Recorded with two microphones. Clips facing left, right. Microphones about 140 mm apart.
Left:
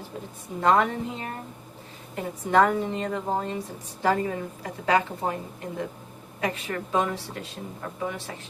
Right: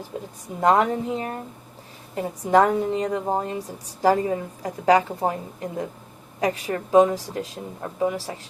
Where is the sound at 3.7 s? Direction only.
35° right (ahead or behind).